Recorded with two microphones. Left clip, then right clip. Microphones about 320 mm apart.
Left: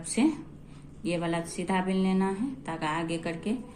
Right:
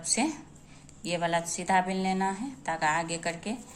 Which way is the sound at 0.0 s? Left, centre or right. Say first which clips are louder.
Left 2 dB; centre.